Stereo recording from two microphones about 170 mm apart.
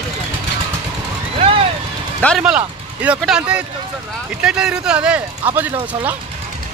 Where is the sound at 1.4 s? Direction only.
30° right (ahead or behind).